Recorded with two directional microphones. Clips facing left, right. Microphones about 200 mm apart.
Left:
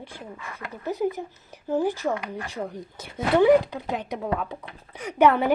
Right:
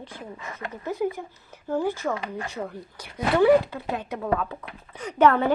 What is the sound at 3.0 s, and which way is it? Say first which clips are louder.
A woman's voice: left 1 dB; 20° left (ahead or behind).